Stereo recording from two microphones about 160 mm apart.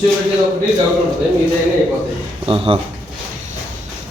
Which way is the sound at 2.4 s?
35° right (ahead or behind).